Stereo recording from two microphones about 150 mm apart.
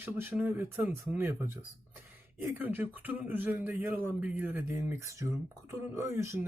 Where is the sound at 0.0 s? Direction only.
15° right (ahead or behind).